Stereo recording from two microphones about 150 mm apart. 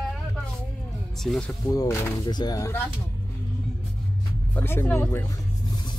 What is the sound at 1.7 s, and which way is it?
Speech, 25° left (ahead or behind).